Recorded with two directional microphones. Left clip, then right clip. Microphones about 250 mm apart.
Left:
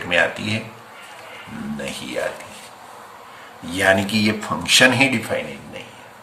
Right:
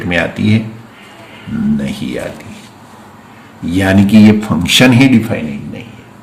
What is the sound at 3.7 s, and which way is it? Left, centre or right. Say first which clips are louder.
Speech: right 6 dB; centre.